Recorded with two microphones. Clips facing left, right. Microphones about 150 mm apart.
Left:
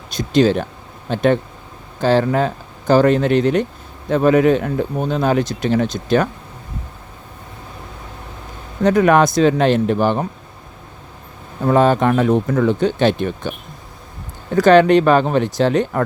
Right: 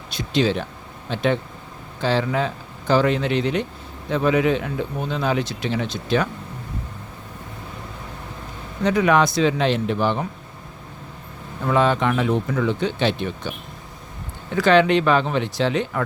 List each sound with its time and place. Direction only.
0.1 s speech: 45° left (ahead or behind)
8.8 s speech: 45° left (ahead or behind)
11.6 s speech: 45° left (ahead or behind)
14.5 s speech: 45° left (ahead or behind)